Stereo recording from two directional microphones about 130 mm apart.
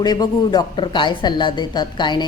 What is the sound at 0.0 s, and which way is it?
Speech, 35° left (ahead or behind).